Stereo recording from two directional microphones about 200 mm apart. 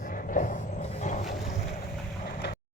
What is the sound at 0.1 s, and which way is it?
Vehicle, 40° left (ahead or behind).